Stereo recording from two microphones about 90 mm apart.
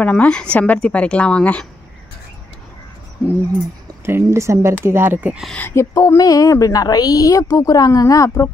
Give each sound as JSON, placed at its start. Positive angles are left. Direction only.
{"t": 0.0, "sound": "a woman's voice", "side_deg": 15}
{"t": 4.0, "sound": "speech", "side_deg": -30}
{"t": 5.6, "sound": "speech", "side_deg": 25}
{"t": 5.9, "sound": "a woman's voice", "side_deg": 45}